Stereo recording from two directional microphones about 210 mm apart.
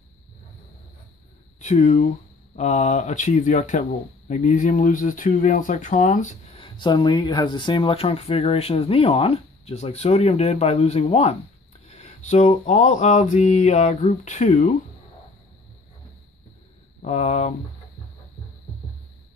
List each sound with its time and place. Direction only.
1.6 s speech: 35° left (ahead or behind)
2.5 s mantra: 35° left (ahead or behind)
4.3 s speech: 35° left (ahead or behind)
11.9 s mantra: 30° left (ahead or behind)
17.0 s mantra: 30° left (ahead or behind)